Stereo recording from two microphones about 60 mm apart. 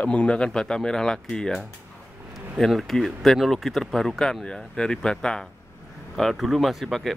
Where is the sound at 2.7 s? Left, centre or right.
Centre.